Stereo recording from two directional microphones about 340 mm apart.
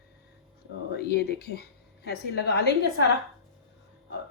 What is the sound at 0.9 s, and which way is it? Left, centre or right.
A woman's voice, left.